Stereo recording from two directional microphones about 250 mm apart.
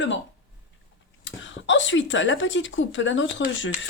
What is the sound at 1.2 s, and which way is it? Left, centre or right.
Speech, left.